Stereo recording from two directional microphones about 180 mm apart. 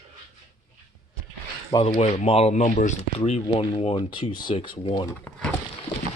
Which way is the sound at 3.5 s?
30° left (ahead or behind).